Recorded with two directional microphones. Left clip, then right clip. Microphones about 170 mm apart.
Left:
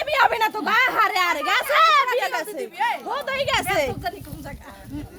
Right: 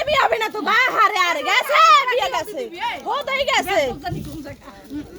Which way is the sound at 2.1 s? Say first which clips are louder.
Right 3 dB; 5° right (ahead or behind).